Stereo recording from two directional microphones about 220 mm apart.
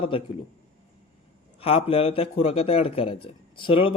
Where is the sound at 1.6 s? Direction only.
25° left (ahead or behind).